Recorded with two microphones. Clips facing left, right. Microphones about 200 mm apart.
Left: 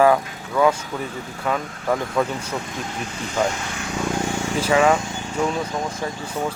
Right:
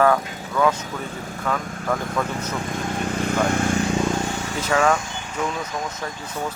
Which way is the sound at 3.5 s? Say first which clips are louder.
Right 10 dB; 50° right (ahead or behind).